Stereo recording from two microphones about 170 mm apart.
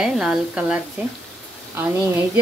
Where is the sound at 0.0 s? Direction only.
Centre (ahead or behind).